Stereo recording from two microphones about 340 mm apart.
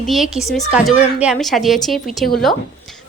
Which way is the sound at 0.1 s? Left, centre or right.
Centre.